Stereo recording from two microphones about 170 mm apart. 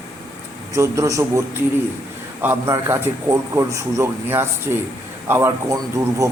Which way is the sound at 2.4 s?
15° right (ahead or behind).